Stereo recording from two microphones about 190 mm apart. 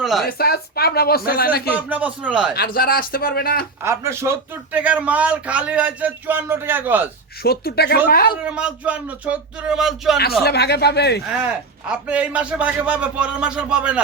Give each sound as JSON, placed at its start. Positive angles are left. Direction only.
{"t": 0.0, "sound": "speech", "side_deg": 0}
{"t": 0.3, "sound": "speech", "side_deg": 55}
{"t": 1.7, "sound": "speech", "side_deg": -10}
{"t": 2.6, "sound": "speech", "side_deg": 50}
{"t": 3.8, "sound": "speech", "side_deg": -15}
{"t": 7.4, "sound": "speech", "side_deg": 55}
{"t": 8.4, "sound": "speech", "side_deg": -5}
{"t": 10.4, "sound": "speech", "side_deg": 60}
{"t": 11.9, "sound": "speech", "side_deg": -5}